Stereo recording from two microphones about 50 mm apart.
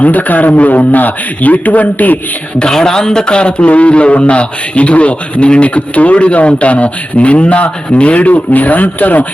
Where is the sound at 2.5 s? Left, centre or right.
Centre.